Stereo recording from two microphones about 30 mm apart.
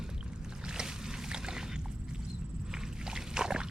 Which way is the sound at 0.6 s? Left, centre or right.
Right.